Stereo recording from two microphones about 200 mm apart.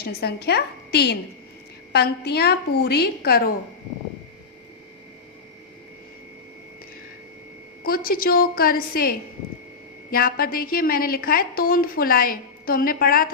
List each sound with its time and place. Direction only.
0.0 s a woman's voice: 55° left (ahead or behind)
7.9 s a woman's voice: 50° left (ahead or behind)